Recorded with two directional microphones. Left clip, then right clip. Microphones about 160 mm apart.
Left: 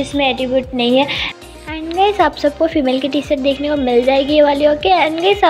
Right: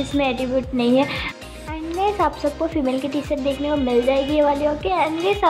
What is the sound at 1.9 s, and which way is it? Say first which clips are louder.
Speech: left 7 dB; 20° left (ahead or behind).